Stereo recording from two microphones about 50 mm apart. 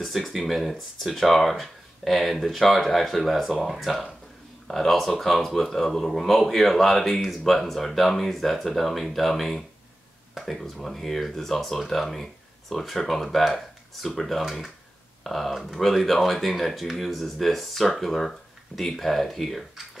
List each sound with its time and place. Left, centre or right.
0.0 s speech: centre